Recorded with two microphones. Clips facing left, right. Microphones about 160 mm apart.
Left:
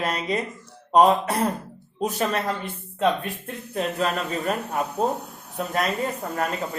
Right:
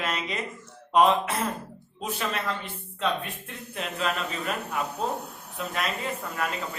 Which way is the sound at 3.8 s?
40° left (ahead or behind).